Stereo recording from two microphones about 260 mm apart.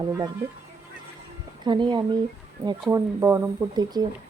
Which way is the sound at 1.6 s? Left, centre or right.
Centre.